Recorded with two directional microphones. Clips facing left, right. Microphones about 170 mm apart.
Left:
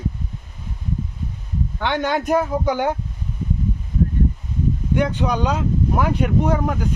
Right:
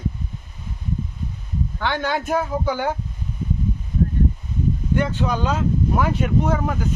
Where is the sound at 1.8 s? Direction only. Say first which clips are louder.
Left 3 dB; 20° left (ahead or behind).